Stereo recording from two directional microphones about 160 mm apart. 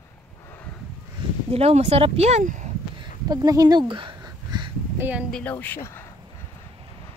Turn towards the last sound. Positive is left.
turn(degrees=15)  # may be behind; listen again after turning